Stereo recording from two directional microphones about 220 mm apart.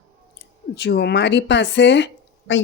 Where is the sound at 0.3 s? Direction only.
50° left (ahead or behind).